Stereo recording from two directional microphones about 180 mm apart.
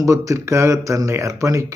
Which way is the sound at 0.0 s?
15° right (ahead or behind).